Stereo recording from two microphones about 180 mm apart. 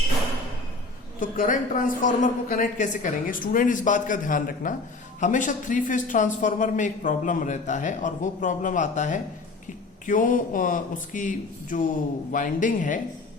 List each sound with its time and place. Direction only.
1.2 s a man's voice: 50° left (ahead or behind)